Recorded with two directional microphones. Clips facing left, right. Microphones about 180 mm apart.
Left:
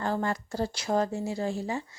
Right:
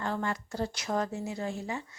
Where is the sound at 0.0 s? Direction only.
35° left (ahead or behind).